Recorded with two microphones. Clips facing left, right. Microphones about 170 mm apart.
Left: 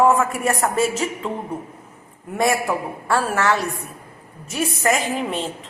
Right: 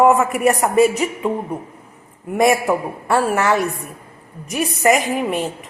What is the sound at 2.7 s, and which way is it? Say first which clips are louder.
Speech: right 4 dB; 20° right (ahead or behind).